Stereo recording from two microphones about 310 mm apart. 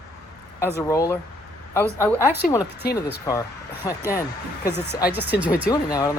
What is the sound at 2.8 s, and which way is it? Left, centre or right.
Speech, left.